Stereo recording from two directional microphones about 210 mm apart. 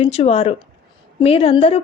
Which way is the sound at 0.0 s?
30° left (ahead or behind).